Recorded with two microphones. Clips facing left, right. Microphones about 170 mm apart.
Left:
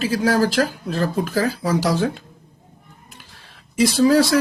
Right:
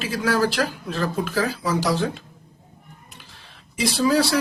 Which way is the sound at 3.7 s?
45° left (ahead or behind).